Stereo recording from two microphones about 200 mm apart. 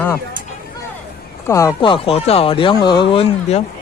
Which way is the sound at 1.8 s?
25° left (ahead or behind).